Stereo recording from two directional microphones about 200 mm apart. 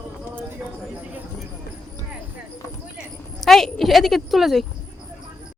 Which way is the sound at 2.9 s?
Centre (ahead or behind).